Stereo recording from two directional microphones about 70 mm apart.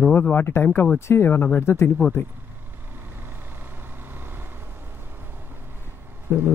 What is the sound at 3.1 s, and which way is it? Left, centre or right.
Vehicle, right.